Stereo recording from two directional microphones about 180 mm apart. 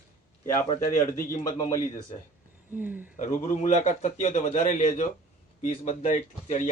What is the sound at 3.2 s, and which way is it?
A man's voice, 45° left (ahead or behind).